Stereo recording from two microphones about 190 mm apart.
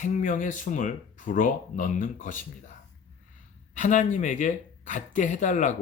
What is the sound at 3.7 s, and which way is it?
Speech, 40° left (ahead or behind).